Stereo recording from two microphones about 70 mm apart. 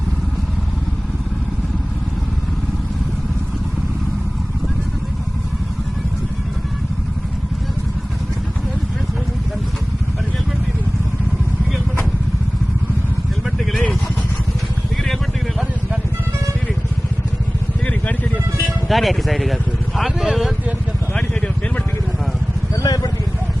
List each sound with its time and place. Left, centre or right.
15.0 s vehicle: centre
18.9 s speech: centre
22.7 s vehicle: left